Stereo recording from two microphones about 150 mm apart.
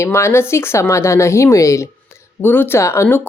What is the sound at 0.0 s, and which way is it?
Speech, 15° left (ahead or behind).